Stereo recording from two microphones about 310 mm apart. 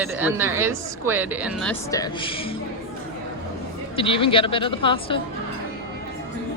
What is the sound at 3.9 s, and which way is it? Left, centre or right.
Speech, centre.